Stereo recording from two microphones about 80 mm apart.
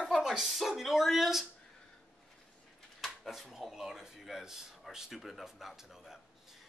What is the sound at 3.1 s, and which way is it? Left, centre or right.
Speech, centre.